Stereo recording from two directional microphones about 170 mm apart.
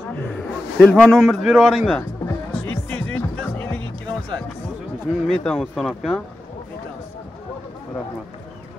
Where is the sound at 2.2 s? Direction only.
10° left (ahead or behind).